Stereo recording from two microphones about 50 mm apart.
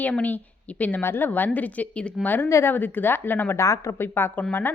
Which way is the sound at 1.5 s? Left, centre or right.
Left.